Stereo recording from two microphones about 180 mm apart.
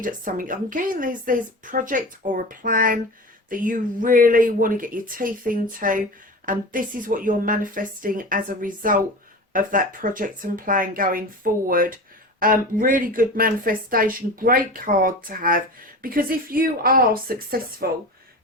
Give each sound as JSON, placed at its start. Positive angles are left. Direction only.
{"t": 0.0, "sound": "speech", "side_deg": -50}